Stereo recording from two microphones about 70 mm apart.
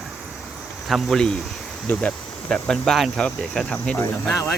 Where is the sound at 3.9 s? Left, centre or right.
Centre.